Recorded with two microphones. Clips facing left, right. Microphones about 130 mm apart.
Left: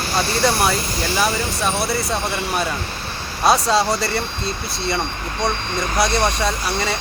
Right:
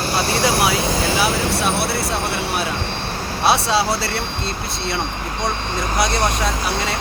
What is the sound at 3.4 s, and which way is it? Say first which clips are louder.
Speech: left 1 dB; 5° right (ahead or behind).